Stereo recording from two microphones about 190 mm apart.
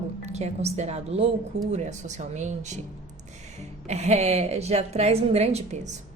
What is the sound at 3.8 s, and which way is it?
A woman's voice, 35° right (ahead or behind).